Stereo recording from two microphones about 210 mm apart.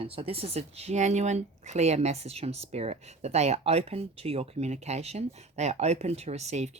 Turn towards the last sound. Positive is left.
turn(degrees=-30)  # may be behind; listen again after turning